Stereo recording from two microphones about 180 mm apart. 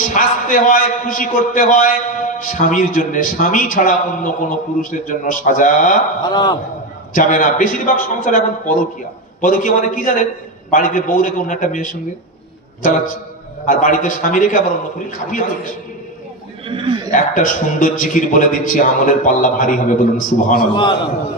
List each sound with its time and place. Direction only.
0.1 s a man's voice: 50° left (ahead or behind)
6.2 s a man's voice: 25° left (ahead or behind)
7.1 s a man's voice: 45° left (ahead or behind)
13.7 s a man's voice: 45° left (ahead or behind)
16.6 s speech: 30° right (ahead or behind)
17.1 s a man's voice: 45° left (ahead or behind)
20.7 s a man's voice: 25° left (ahead or behind)